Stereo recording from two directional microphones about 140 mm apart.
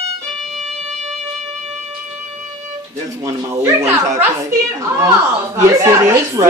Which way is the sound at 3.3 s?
20° right (ahead or behind).